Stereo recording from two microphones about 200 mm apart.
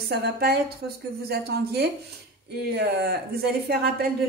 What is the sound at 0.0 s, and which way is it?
A woman's voice, 55° right (ahead or behind).